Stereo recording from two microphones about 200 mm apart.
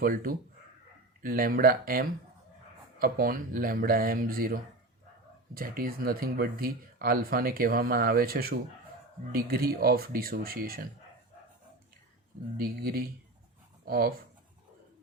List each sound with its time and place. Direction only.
0.0 s speech: 45° right (ahead or behind)
12.5 s speech: 50° right (ahead or behind)